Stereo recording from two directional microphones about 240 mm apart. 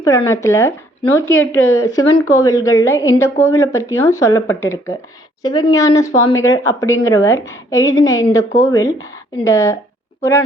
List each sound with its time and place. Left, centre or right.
0.0 s a woman's voice: centre
1.3 s speech: left
1.8 s a woman's voice: centre